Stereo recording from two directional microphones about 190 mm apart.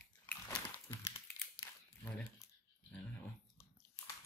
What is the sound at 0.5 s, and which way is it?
Crumpling, 15° left (ahead or behind).